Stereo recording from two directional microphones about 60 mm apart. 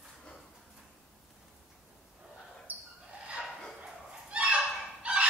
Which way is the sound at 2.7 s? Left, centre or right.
Right.